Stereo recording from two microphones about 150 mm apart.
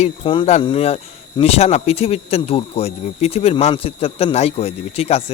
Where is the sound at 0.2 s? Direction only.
35° left (ahead or behind).